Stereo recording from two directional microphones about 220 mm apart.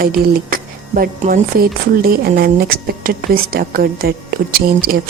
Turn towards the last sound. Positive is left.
turn(degrees=-40)  # may be behind; listen again after turning